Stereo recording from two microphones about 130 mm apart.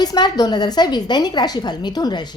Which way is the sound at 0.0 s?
30° left (ahead or behind).